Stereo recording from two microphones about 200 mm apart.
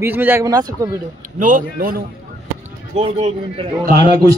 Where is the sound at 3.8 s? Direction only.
45° right (ahead or behind).